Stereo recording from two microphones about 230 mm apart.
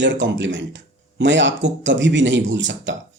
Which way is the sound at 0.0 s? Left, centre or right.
Right.